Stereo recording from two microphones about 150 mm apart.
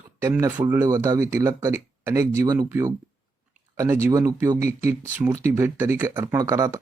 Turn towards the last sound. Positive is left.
turn(degrees=-20)  # may be behind; listen again after turning